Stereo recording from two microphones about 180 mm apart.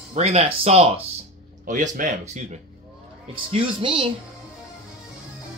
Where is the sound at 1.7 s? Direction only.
45° right (ahead or behind).